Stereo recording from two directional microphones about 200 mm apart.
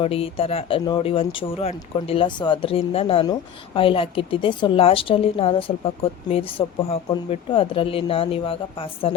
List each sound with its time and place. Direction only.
0.0 s a woman's voice: 30° left (ahead or behind)